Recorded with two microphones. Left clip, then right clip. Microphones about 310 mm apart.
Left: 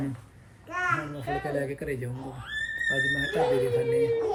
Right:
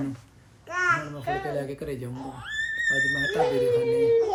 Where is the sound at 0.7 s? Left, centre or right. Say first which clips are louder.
Right 4 dB; right.